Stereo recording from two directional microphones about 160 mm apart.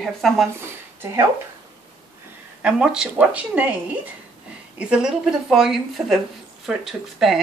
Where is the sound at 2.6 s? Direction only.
5° right (ahead or behind).